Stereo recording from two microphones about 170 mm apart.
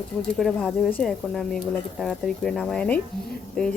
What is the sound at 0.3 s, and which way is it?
Speech, 5° left (ahead or behind).